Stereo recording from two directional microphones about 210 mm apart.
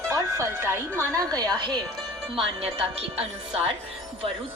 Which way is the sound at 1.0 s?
15° right (ahead or behind).